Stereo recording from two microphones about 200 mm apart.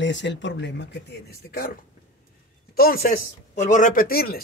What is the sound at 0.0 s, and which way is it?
Speech, 65° left (ahead or behind).